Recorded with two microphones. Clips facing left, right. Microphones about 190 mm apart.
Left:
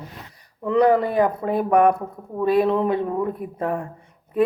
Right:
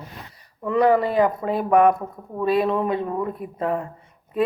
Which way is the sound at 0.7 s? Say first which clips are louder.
Left 1 dB; 50° left (ahead or behind).